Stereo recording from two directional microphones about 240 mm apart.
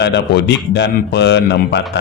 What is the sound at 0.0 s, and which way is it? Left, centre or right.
A man's voice, left.